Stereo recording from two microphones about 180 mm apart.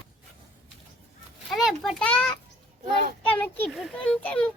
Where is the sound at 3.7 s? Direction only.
Centre (ahead or behind).